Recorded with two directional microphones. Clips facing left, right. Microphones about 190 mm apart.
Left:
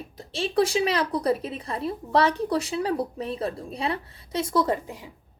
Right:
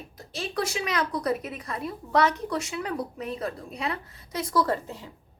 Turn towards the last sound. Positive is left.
turn(degrees=15)  # may be behind; listen again after turning